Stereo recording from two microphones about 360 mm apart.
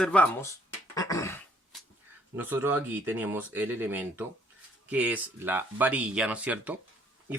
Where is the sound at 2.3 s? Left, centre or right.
Centre.